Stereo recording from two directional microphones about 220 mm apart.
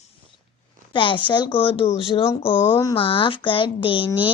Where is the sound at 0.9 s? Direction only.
20° left (ahead or behind).